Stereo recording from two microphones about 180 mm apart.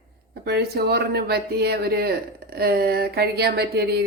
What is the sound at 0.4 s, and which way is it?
Speech, 65° right (ahead or behind).